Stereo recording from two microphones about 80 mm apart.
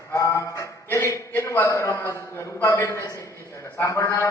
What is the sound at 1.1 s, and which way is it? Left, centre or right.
A man's voice, left.